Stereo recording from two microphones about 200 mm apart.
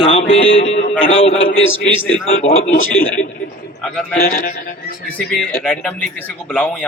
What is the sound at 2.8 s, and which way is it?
Speech, 85° left.